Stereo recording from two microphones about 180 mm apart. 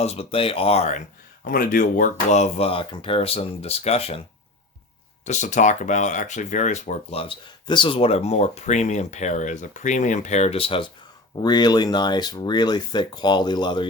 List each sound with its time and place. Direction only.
0.0 s speech: 35° left (ahead or behind)
1.5 s speech: 55° left (ahead or behind); by 4.2 s 35° left (ahead or behind)
5.2 s speech: 40° left (ahead or behind); by 13.8 s 25° left (ahead or behind)